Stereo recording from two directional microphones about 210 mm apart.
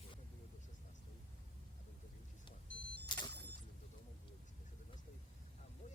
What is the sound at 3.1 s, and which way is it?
Single-lens reflex camera, 20° left (ahead or behind).